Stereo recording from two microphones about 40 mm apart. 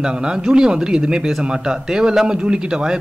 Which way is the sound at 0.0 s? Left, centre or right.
Centre.